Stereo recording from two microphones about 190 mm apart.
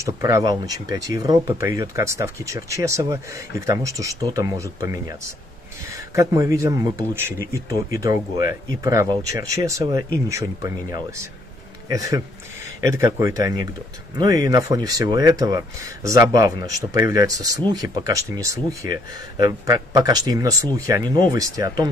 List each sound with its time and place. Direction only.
0.0 s speech: 15° right (ahead or behind)
12.9 s speech: 15° right (ahead or behind)